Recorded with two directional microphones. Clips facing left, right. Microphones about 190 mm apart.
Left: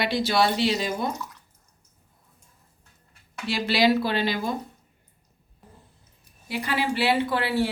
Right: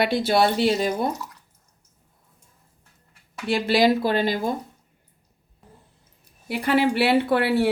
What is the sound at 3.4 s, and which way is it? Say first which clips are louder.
Speech: right 3 dB; 50° right (ahead or behind).